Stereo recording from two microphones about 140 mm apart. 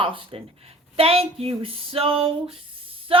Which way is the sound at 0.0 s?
40° right (ahead or behind).